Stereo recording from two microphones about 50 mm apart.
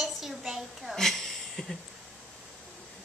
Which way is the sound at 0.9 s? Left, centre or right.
Centre.